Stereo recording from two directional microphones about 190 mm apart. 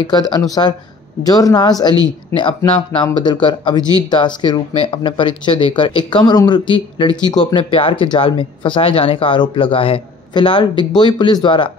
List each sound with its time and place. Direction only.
0.0 s speech: 20° left (ahead or behind)